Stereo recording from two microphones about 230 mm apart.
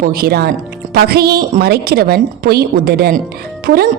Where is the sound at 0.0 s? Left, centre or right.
Right.